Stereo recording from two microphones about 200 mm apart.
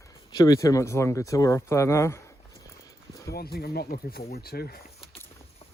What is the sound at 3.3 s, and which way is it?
Speech, 50° left (ahead or behind).